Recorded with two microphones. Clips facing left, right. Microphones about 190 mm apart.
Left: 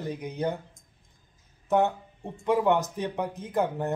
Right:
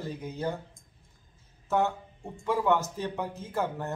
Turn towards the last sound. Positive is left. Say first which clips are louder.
# left 4 dB
turn(degrees=15)  # may be behind; listen again after turning